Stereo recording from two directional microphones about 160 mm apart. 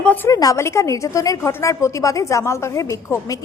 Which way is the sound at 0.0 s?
10° left (ahead or behind).